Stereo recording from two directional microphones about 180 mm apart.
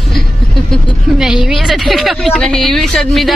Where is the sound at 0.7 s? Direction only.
Centre (ahead or behind).